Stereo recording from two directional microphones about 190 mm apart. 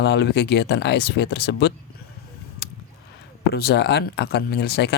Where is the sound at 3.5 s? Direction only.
60° left (ahead or behind).